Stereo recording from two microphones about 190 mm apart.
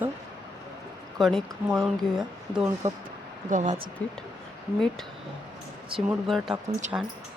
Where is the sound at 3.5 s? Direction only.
40° right (ahead or behind).